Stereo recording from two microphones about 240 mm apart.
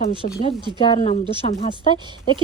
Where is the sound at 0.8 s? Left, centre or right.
Left.